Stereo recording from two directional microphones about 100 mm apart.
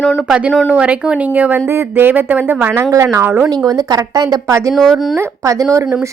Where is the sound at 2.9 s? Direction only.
30° right (ahead or behind).